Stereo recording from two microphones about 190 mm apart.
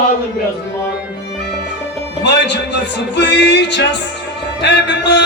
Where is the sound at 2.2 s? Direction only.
65° left (ahead or behind).